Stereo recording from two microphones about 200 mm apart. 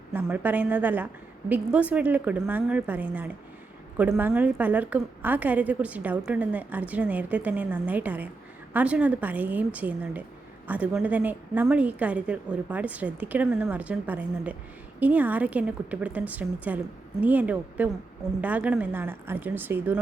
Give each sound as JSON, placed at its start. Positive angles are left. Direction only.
{"t": 0.1, "sound": "a woman's voice", "side_deg": -10}